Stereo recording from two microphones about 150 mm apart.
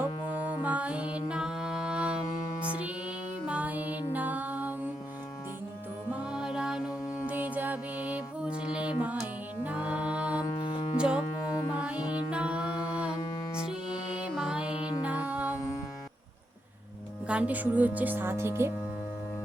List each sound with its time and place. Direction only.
0.6 s music: 10° right (ahead or behind)
3.4 s music: 10° right (ahead or behind)
6.1 s music: 5° right (ahead or behind)
10.7 s music: 45° left (ahead or behind)
10.9 s music: 5° right (ahead or behind)
17.2 s speech: 10° right (ahead or behind)